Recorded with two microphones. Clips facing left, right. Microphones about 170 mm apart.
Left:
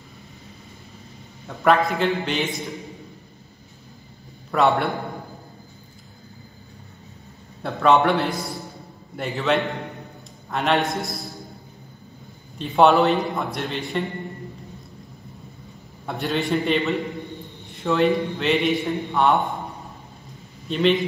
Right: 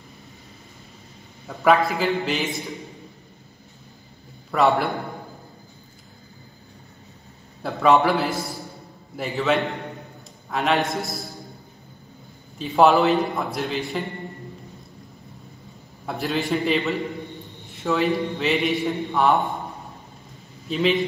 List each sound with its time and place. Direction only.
1.6 s a man's voice: centre (ahead or behind)
4.5 s a man's voice: centre (ahead or behind)
7.6 s a man's voice: centre (ahead or behind)
12.5 s a man's voice: centre (ahead or behind)
16.1 s a man's voice: centre (ahead or behind)
20.6 s a man's voice: centre (ahead or behind)